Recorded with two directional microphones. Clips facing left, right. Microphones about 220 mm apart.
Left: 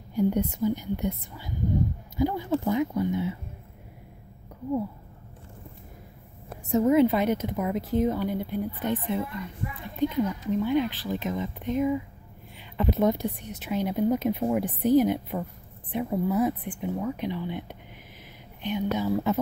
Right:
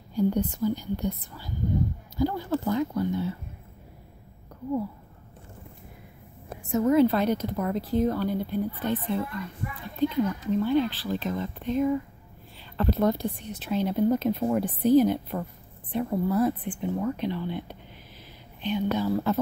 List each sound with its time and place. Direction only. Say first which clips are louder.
0.1 s a woman's voice: even; 20° left (ahead or behind)
6.8 s a woman's voice: even; 20° left (ahead or behind)